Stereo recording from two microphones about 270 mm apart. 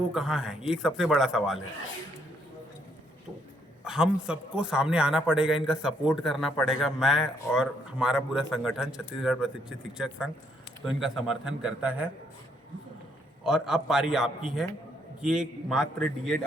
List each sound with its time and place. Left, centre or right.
0.1 s a man's voice: centre
3.8 s a man's voice: centre
13.4 s a man's voice: centre